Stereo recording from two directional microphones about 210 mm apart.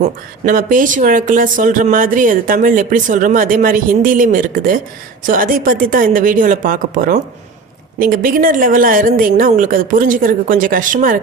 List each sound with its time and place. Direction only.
0.0 s speech: 40° right (ahead or behind)